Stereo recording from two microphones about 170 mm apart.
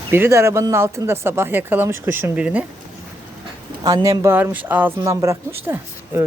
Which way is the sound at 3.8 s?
20° right (ahead or behind).